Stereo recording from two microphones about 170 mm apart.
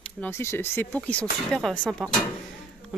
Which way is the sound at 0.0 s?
10° left (ahead or behind).